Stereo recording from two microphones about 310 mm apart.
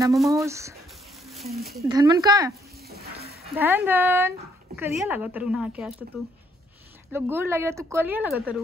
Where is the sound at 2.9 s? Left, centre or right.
Right.